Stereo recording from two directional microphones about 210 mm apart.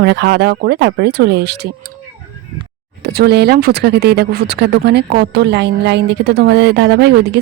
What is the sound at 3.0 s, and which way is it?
Speech, 50° right (ahead or behind).